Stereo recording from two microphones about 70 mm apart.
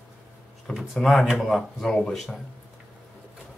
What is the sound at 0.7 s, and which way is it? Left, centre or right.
Speech, centre.